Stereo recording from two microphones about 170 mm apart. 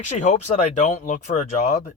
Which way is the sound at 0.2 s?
45° left (ahead or behind).